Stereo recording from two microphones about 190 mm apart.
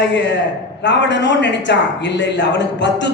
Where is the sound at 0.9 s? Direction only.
65° left (ahead or behind).